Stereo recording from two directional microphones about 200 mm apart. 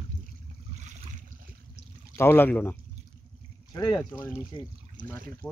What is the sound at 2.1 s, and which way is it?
Speech, 10° left (ahead or behind).